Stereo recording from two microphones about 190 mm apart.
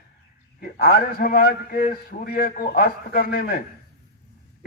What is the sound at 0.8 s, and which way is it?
A man's voice, 50° left (ahead or behind).